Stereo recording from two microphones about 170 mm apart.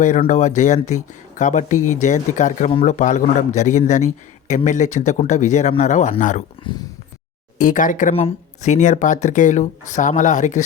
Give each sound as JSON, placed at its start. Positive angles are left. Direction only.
{"t": 0.2, "sound": "a man's voice", "side_deg": 45}
{"t": 7.6, "sound": "a man's voice", "side_deg": 50}